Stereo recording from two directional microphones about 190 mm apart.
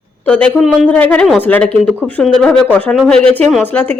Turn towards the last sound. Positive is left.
turn(degrees=5)  # may be behind; listen again after turning